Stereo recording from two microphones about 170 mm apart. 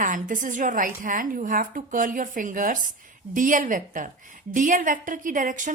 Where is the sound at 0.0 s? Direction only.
50° right (ahead or behind).